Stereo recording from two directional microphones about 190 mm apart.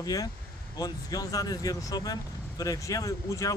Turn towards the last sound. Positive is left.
turn(degrees=15)  # may be behind; listen again after turning